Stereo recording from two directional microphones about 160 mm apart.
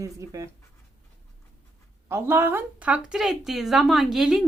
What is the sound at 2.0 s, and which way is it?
Speech, 15° right (ahead or behind).